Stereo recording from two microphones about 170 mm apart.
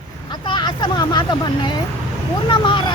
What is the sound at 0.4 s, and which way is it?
Vehicle, 25° left (ahead or behind).